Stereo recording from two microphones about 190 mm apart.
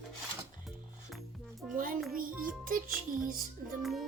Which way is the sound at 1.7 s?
45° right (ahead or behind).